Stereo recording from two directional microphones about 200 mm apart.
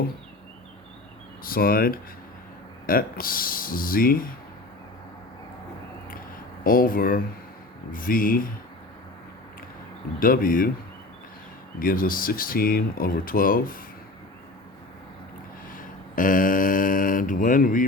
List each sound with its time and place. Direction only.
1.5 s speech: 45° left (ahead or behind)
6.7 s speech: 45° left (ahead or behind)
10.2 s speech: 45° left (ahead or behind)
11.8 s speech: 45° left (ahead or behind)
15.7 s a sound: 40° left (ahead or behind)